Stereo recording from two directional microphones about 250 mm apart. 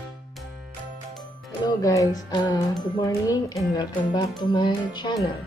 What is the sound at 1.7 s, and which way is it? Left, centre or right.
Music, centre.